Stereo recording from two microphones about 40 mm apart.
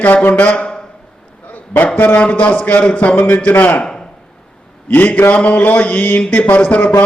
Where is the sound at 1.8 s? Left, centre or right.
Left.